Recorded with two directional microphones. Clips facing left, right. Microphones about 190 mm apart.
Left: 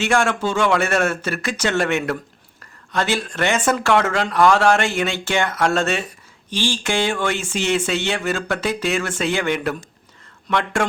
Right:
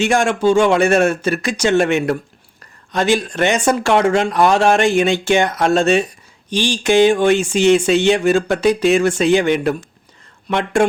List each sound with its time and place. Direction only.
0.0 s speech: 15° right (ahead or behind)